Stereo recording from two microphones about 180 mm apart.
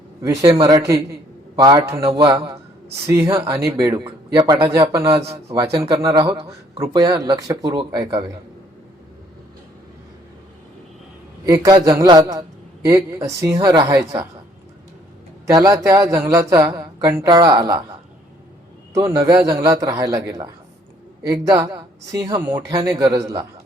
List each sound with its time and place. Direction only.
0.2 s a man's voice: 20° right (ahead or behind)
3.1 s a man's voice: 15° right (ahead or behind)
11.4 s a man's voice: 20° right (ahead or behind)
15.4 s a man's voice: 20° right (ahead or behind)
18.9 s a man's voice: 20° right (ahead or behind)